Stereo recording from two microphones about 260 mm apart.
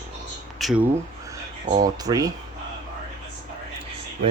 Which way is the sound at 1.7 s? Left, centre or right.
Right.